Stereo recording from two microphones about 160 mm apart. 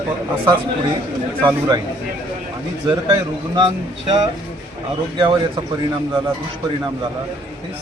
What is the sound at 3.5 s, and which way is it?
Speech, 30° right (ahead or behind).